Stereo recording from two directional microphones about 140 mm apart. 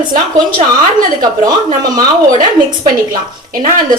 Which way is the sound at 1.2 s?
30° right (ahead or behind).